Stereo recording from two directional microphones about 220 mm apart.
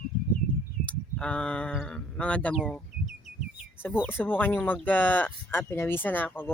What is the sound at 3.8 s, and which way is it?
Speech, 10° left (ahead or behind).